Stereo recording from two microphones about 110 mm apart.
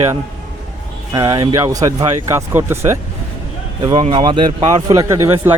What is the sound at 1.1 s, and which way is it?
Speech, 35° right (ahead or behind).